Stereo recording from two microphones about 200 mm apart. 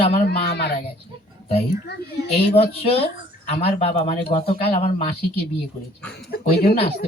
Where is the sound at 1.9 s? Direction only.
55° left (ahead or behind).